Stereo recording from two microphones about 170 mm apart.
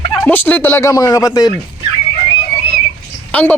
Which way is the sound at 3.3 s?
10° left (ahead or behind).